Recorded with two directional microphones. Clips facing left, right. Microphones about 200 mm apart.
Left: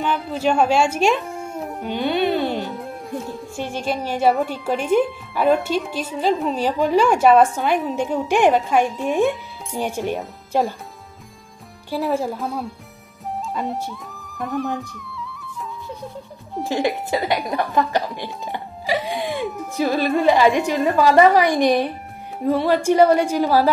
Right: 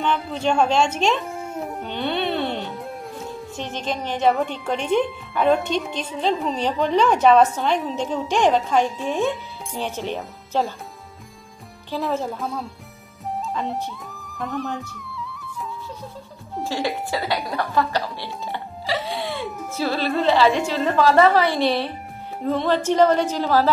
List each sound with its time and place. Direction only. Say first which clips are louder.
0.0 s speech: left 2 dB; 5° left (ahead or behind)
11.9 s speech: left 3 dB; 10° left (ahead or behind)
12.4 s speech: left 2 dB; centre (ahead or behind)
13.3 s music: left 1 dB; centre (ahead or behind)
16.6 s speech: left 4 dB; 20° left (ahead or behind)